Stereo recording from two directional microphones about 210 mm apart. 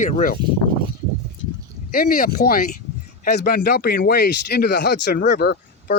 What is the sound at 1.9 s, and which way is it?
Speech, 45° left (ahead or behind).